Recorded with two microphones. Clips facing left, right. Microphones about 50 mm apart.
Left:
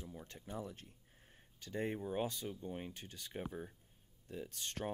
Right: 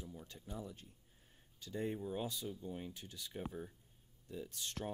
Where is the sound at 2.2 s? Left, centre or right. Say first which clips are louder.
Left 2 dB; left.